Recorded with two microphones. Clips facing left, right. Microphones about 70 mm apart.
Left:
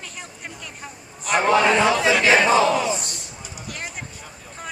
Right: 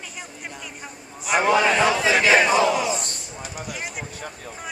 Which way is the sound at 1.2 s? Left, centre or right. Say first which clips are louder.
Left 1 dB; centre.